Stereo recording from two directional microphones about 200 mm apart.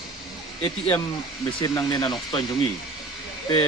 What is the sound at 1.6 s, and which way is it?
Speech, 20° left (ahead or behind).